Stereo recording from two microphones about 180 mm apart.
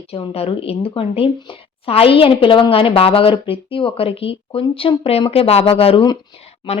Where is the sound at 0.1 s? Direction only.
30° left (ahead or behind).